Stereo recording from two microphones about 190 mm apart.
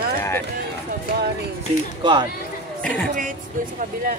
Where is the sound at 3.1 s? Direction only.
45° right (ahead or behind).